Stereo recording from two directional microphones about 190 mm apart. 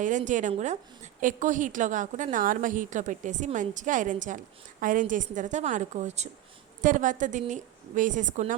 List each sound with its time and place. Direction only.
0.0 s a woman's voice: 40° right (ahead or behind)